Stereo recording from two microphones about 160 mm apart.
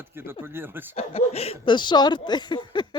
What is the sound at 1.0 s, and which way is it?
Speech, 40° left (ahead or behind).